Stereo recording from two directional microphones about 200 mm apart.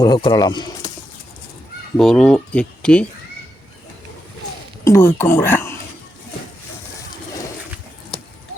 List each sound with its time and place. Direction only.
0.0 s speech: 20° left (ahead or behind)
2.0 s speech: 5° left (ahead or behind)
4.9 s speech: 10° left (ahead or behind)